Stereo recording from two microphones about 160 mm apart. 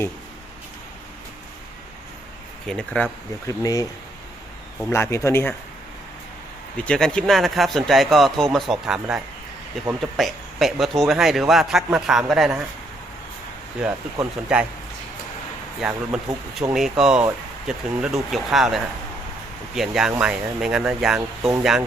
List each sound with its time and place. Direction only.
2.6 s a man's voice: 5° left (ahead or behind)
3.4 s speech: 20° left (ahead or behind)
4.9 s a man's voice: 15° left (ahead or behind)
6.8 s a man's voice: 5° left (ahead or behind)
13.8 s speech: 10° right (ahead or behind)
15.8 s a man's voice: 5° right (ahead or behind)